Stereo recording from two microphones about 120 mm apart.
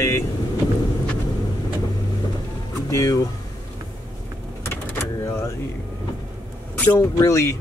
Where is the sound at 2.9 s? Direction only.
30° left (ahead or behind).